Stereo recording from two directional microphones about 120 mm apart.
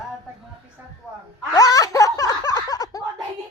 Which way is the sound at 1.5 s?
30° left (ahead or behind).